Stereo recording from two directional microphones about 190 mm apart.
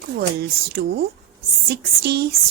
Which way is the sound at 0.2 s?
55° right (ahead or behind).